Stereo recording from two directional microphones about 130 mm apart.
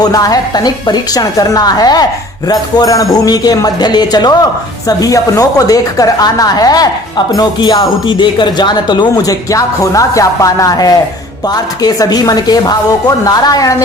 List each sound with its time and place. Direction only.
0.0 s speech: 30° left (ahead or behind)